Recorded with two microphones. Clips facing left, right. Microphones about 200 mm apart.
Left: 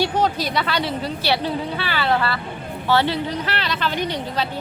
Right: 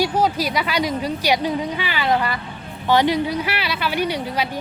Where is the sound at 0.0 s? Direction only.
10° right (ahead or behind).